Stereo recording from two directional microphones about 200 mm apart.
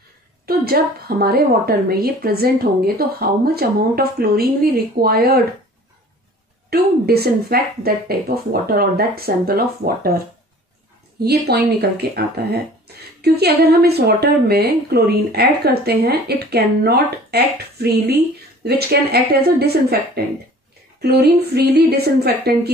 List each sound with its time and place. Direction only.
0.5 s a woman's voice: 50° right (ahead or behind)
6.7 s a woman's voice: 50° right (ahead or behind)
21.0 s a woman's voice: 55° right (ahead or behind)